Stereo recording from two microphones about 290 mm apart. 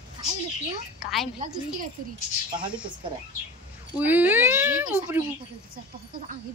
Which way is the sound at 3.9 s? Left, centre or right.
Centre.